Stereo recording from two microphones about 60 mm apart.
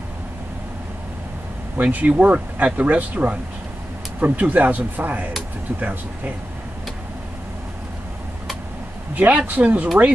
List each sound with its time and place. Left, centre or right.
1.8 s speech: right
9.1 s speech: right